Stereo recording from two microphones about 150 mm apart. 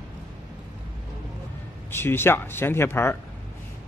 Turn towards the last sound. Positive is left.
turn(degrees=15)  # may be behind; listen again after turning